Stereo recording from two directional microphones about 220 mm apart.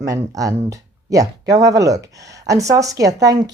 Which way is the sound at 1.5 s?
15° right (ahead or behind).